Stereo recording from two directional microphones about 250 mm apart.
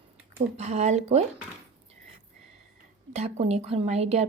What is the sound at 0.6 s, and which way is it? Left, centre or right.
Speech, right.